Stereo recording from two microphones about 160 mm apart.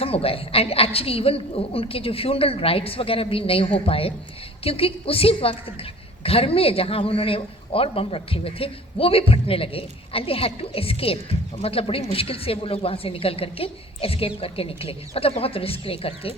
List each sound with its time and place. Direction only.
0.0 s a woman's voice: 35° left (ahead or behind)